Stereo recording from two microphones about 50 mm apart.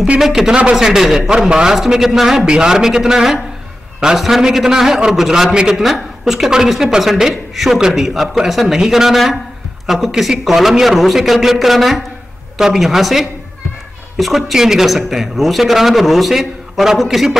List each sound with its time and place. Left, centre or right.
0.2 s a man's voice: centre
5.5 s a man's voice: centre